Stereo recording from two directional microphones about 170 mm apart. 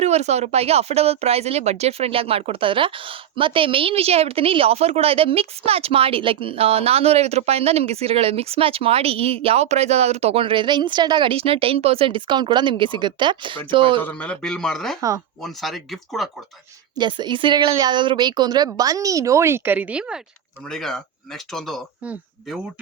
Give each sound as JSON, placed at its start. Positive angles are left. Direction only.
{"t": 0.0, "sound": "speech", "side_deg": -40}
{"t": 14.0, "sound": "speech", "side_deg": 10}
{"t": 17.0, "sound": "speech", "side_deg": -25}